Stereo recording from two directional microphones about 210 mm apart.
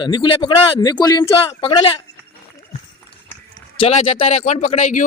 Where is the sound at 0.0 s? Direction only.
20° left (ahead or behind).